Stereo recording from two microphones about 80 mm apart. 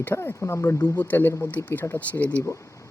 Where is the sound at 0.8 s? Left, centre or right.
Left.